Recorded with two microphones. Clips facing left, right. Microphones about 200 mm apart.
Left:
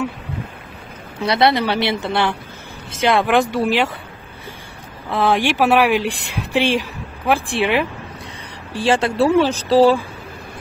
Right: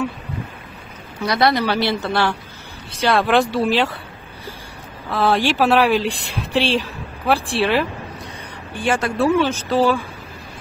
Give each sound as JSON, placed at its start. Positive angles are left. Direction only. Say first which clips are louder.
{"t": 1.2, "sound": "a woman's voice", "louder": "left 1 dB", "side_deg": 25}
{"t": 5.1, "sound": "speech", "louder": "left 1 dB", "side_deg": 20}
{"t": 8.7, "sound": "speech", "louder": "left 3 dB", "side_deg": 30}